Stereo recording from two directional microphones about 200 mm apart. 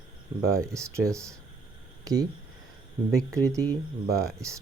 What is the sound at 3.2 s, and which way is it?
Speech, 15° right (ahead or behind).